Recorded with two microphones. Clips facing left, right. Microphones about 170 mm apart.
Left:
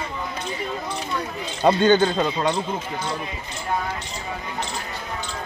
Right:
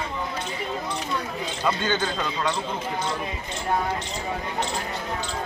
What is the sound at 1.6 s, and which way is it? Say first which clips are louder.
Speech: left 10 dB; 40° left (ahead or behind).